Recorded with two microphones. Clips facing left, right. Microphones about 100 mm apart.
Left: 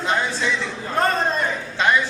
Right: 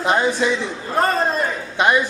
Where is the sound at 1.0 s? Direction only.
5° right (ahead or behind).